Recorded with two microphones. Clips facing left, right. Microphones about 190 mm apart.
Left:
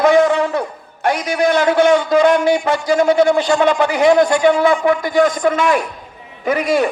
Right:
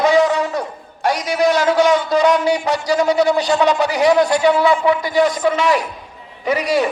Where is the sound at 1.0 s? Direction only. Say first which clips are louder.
Even; 55° left (ahead or behind).